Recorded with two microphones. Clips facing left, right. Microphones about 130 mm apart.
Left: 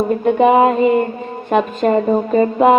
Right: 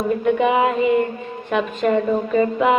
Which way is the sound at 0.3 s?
40° left (ahead or behind).